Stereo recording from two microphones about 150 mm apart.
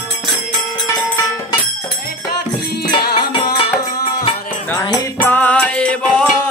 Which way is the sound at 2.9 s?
35° left (ahead or behind).